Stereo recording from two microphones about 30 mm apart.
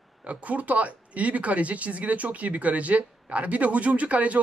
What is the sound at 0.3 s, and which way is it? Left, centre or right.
Speech, right.